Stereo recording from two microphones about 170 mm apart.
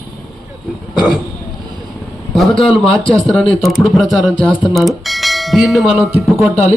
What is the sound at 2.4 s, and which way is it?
Speech, centre (ahead or behind).